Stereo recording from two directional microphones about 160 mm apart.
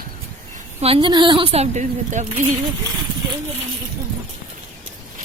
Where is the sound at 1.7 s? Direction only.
50° right (ahead or behind).